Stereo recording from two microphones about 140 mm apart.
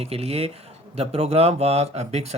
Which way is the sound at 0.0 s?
45° right (ahead or behind).